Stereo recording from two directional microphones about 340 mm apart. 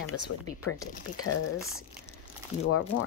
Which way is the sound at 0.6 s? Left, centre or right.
Left.